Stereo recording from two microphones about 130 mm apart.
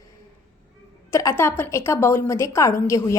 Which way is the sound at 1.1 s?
25° left (ahead or behind).